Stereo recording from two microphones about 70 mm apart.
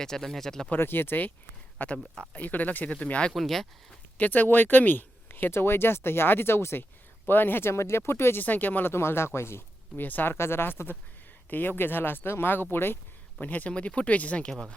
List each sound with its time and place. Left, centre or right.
0.0 s speech: centre
0.7 s speech: left
3.3 s speech: centre
4.2 s speech: left
13.4 s speech: left